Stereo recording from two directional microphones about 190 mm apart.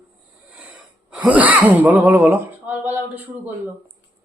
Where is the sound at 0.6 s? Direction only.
10° right (ahead or behind).